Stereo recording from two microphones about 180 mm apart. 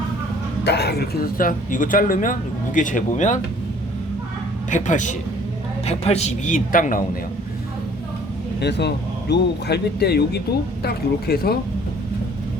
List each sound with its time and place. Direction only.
0.6 s speech: 65° left (ahead or behind); by 3.4 s 45° left (ahead or behind)
4.7 s speech: 45° left (ahead or behind)
8.6 s speech: 70° left (ahead or behind)